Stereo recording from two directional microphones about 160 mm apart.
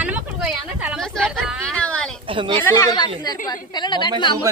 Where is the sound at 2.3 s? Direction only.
30° right (ahead or behind).